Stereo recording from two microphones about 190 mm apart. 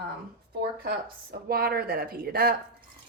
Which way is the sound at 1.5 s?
55° right (ahead or behind).